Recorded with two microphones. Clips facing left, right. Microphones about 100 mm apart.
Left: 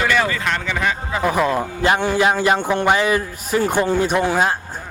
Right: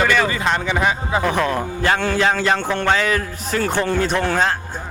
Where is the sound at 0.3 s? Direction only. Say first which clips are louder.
Right 2 dB; 20° right (ahead or behind).